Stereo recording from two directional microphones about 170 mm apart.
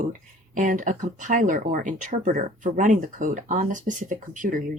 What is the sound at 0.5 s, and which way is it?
Speech, 50° right (ahead or behind).